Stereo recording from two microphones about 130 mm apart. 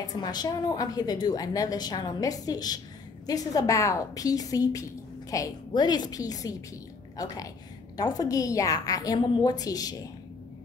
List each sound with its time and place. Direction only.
0.0 s a woman's voice: 30° left (ahead or behind)